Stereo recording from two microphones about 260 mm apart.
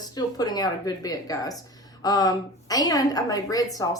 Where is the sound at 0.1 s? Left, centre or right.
Centre.